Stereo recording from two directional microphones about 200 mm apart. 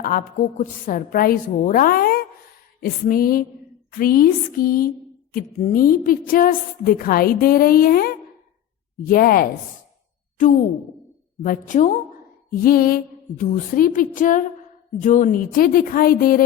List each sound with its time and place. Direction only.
0.0 s a woman's voice: 45° left (ahead or behind)
11.4 s a woman's voice: 40° left (ahead or behind)